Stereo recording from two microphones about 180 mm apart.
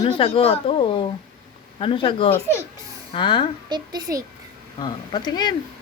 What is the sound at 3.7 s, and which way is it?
Speech, 20° right (ahead or behind).